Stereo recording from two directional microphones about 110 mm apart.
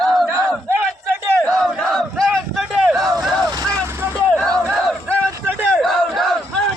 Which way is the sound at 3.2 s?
Centre (ahead or behind).